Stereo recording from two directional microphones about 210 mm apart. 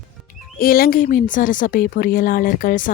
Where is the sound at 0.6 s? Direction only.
45° left (ahead or behind).